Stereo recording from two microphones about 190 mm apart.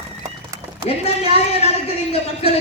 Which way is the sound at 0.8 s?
30° left (ahead or behind).